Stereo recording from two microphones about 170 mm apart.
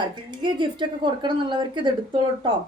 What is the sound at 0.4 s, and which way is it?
A woman's voice, 25° right (ahead or behind).